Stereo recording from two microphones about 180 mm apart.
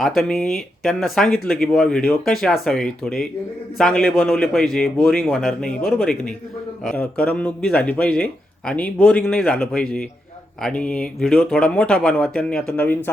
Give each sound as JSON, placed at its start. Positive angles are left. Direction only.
{"t": 0.0, "sound": "speech", "side_deg": 0}